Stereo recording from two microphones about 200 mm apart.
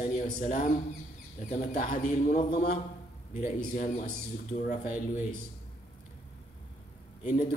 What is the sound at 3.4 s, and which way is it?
A man's voice, 40° left (ahead or behind).